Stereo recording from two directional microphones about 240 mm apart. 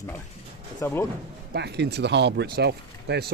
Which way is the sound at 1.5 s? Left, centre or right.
Right.